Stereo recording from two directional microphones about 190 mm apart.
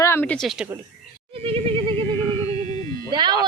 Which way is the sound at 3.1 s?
25° right (ahead or behind).